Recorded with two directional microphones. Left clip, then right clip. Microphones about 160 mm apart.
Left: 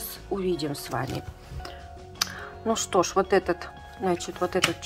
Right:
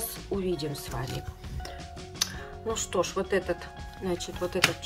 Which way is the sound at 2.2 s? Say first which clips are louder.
Left 2 dB; 20° left (ahead or behind).